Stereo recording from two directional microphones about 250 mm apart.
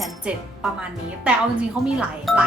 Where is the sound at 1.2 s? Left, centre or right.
Centre.